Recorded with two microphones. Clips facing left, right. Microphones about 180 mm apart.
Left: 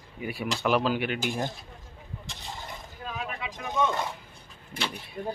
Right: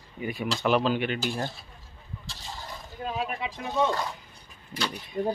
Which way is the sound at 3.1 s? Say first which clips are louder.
Right 5 dB; 30° right (ahead or behind).